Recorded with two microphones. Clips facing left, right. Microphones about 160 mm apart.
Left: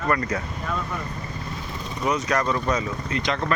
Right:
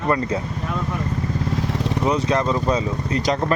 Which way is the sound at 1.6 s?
80° right.